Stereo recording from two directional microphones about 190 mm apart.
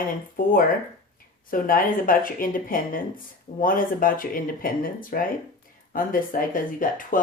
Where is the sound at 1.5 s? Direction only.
45° left (ahead or behind).